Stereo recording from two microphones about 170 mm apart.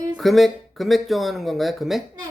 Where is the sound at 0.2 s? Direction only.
Centre (ahead or behind).